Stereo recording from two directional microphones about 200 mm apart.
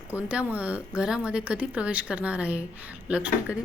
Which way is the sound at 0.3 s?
5° right (ahead or behind).